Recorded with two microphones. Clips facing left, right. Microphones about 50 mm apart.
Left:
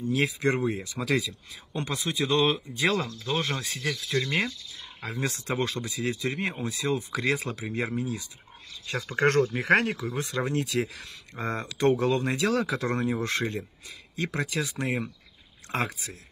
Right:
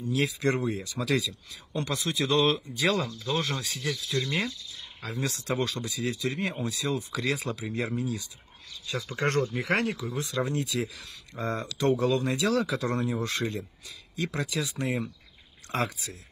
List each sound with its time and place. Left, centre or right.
0.0 s speech: left
0.5 s speech: centre
0.8 s speech: left
1.7 s speech: centre
3.3 s speech: left